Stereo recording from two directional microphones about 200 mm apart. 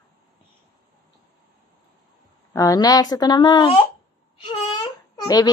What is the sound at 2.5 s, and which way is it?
Speech, 20° left (ahead or behind).